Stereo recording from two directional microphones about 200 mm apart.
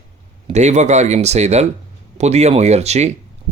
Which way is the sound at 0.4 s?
35° right (ahead or behind).